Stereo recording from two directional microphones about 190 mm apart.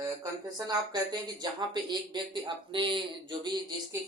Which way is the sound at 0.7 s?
20° right (ahead or behind).